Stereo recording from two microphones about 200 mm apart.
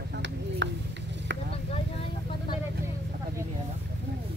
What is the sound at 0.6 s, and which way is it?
Speech, 65° right (ahead or behind).